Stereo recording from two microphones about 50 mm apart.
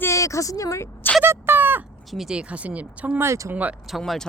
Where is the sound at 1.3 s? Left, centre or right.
Right.